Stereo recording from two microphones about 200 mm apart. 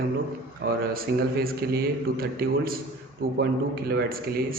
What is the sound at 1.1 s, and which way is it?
A man's voice, 50° right (ahead or behind).